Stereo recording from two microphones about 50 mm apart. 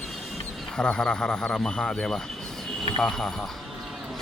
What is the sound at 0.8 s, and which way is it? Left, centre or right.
Speech, centre.